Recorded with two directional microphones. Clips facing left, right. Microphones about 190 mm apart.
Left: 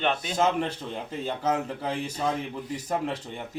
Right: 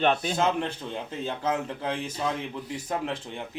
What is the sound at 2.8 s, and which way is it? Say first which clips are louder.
Speech: left 2 dB; 5° left (ahead or behind).